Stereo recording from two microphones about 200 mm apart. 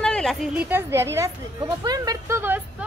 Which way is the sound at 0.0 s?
Centre (ahead or behind).